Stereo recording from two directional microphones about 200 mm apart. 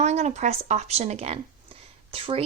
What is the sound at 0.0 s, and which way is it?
A woman's voice, 35° right (ahead or behind).